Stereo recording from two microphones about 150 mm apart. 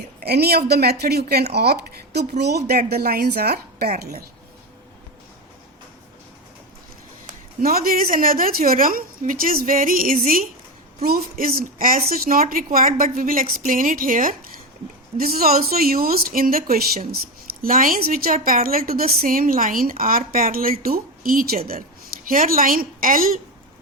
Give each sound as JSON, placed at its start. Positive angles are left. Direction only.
{"t": 0.3, "sound": "speech", "side_deg": -90}
{"t": 7.6, "sound": "a woman's voice", "side_deg": -80}
{"t": 11.0, "sound": "a woman's voice", "side_deg": -85}
{"t": 15.2, "sound": "a woman's voice", "side_deg": -75}
{"t": 17.6, "sound": "a woman's voice", "side_deg": -65}